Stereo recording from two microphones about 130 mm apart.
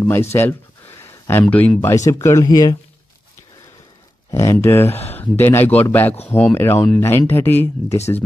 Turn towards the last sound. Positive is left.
turn(degrees=15)  # may be behind; listen again after turning